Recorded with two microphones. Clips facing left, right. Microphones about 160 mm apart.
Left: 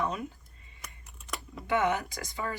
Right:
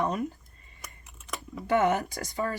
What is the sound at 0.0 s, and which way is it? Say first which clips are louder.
Speech: right 4 dB; 40° right (ahead or behind).